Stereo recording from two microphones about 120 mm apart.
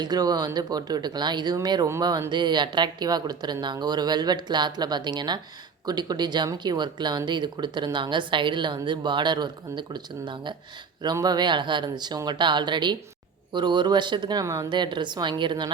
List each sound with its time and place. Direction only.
0.0 s speech: 35° right (ahead or behind)
14.4 s speech: 25° right (ahead or behind)
14.7 s speech: 40° right (ahead or behind)